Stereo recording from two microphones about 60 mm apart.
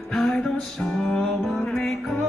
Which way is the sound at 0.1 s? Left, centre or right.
Centre.